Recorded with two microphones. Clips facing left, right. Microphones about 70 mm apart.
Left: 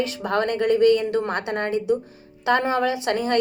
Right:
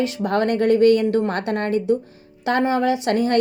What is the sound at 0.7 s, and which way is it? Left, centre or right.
Speech, left.